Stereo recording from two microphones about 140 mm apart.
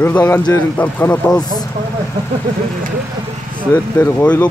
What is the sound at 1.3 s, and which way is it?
Speech, 30° left (ahead or behind).